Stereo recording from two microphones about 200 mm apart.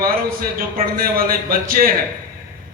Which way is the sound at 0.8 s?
45° right (ahead or behind).